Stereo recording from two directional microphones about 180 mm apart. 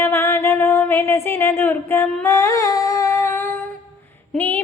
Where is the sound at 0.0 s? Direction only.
15° left (ahead or behind).